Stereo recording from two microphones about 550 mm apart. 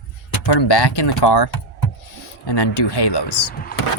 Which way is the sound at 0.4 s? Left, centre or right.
Left.